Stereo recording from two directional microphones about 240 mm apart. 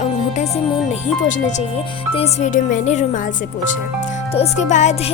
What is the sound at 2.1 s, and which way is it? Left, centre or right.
Speech, left.